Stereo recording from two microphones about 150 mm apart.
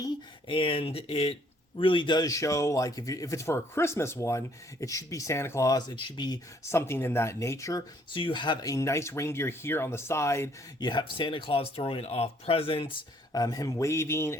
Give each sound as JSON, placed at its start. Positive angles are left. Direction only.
{"t": 0.0, "sound": "speech", "side_deg": 35}
{"t": 13.3, "sound": "speech", "side_deg": 25}